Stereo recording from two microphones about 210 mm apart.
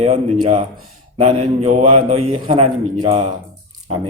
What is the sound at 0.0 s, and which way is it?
A man's voice, 30° right (ahead or behind).